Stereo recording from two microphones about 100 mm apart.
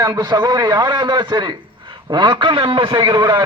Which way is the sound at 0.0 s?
45° right (ahead or behind).